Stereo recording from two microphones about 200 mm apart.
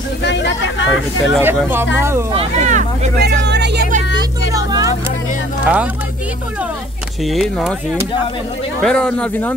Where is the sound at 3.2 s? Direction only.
55° right (ahead or behind).